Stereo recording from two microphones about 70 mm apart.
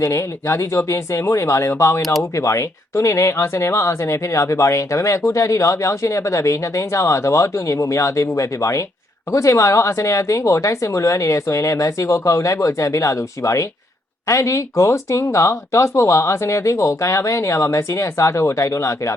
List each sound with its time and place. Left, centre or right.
0.0 s speech: left